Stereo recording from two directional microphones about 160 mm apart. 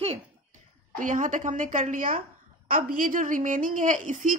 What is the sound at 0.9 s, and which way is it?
A woman's voice, 55° right (ahead or behind).